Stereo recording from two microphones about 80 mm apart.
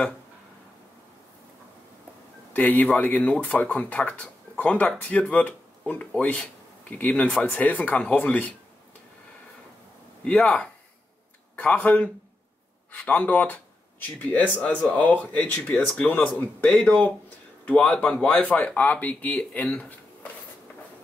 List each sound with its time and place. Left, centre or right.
2.5 s speech: left
10.2 s speech: centre